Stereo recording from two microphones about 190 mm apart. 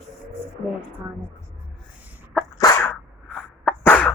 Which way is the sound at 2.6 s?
15° left (ahead or behind).